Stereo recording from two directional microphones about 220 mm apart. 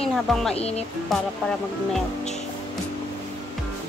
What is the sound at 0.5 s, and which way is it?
Speech, 30° left (ahead or behind).